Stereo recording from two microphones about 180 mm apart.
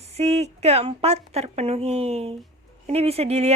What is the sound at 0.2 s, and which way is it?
Speech, 35° right (ahead or behind).